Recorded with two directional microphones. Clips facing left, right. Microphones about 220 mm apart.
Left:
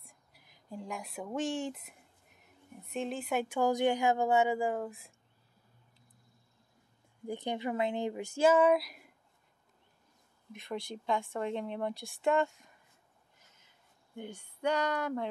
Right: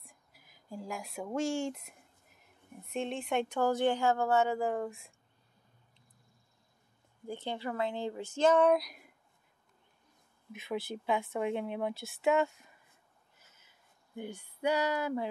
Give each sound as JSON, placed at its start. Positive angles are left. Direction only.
{"t": 0.0, "sound": "speech", "side_deg": 0}
{"t": 7.2, "sound": "speech", "side_deg": 15}
{"t": 10.5, "sound": "a woman's voice", "side_deg": -5}
{"t": 13.4, "sound": "a sound", "side_deg": -5}